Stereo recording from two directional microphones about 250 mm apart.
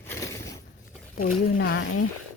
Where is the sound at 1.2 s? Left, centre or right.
Left.